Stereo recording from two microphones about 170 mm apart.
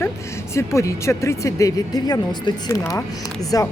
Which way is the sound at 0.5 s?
15° left (ahead or behind).